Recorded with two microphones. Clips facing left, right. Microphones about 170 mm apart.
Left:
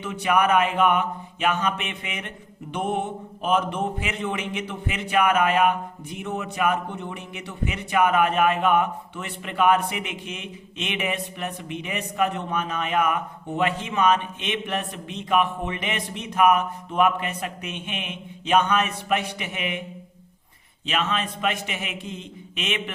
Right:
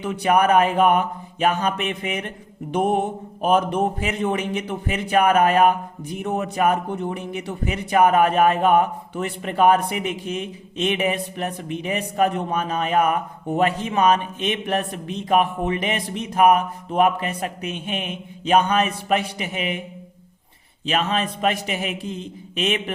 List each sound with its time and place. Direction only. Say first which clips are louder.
0.0 s mantra: right 3 dB; 40° right (ahead or behind)
20.8 s mantra: right 4 dB; 35° right (ahead or behind)